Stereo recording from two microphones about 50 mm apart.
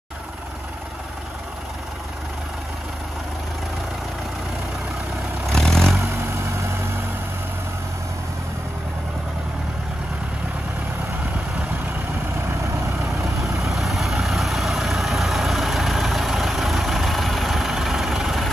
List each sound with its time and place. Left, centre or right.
5.5 s vehicle: centre
6.4 s vehicle: right
13.2 s vehicle: centre